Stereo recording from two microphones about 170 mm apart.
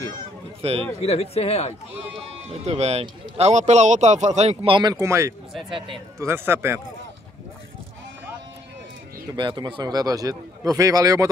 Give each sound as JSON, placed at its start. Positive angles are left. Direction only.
{"t": 0.6, "sound": "a man's voice", "side_deg": -35}
{"t": 1.0, "sound": "speech", "side_deg": 35}
{"t": 2.5, "sound": "speech", "side_deg": -40}
{"t": 5.5, "sound": "speech", "side_deg": 0}
{"t": 6.1, "sound": "speech", "side_deg": -15}
{"t": 9.3, "sound": "a man's voice", "side_deg": -25}